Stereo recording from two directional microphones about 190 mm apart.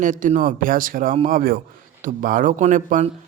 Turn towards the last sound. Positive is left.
turn(degrees=-40)  # may be behind; listen again after turning